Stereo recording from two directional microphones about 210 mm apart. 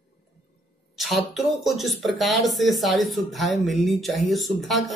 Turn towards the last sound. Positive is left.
turn(degrees=0)  # may be behind; listen again after turning